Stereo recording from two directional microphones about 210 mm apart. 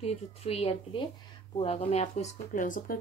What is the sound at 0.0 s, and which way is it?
Speech, 30° left (ahead or behind).